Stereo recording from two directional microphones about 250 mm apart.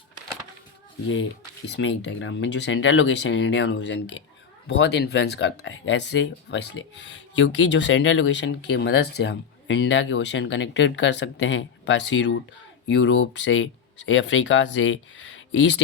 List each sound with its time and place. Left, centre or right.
1.6 s speech: left